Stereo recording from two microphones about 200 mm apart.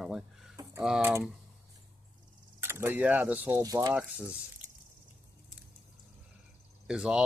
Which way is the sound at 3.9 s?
5° right (ahead or behind).